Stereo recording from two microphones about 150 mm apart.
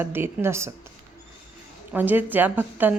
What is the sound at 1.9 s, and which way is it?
Speech, 10° right (ahead or behind).